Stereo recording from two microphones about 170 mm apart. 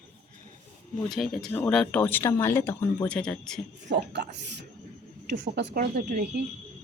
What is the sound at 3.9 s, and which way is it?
Speech, 90° right.